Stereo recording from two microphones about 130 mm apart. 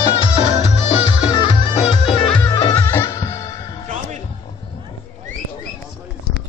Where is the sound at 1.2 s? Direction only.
40° left (ahead or behind).